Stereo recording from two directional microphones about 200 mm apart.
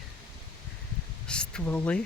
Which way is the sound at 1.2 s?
5° left (ahead or behind).